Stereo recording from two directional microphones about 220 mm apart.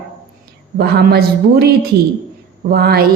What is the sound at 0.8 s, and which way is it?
A woman's voice, 45° right (ahead or behind).